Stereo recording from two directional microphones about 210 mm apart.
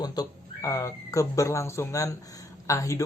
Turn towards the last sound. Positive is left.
turn(degrees=15)  # may be behind; listen again after turning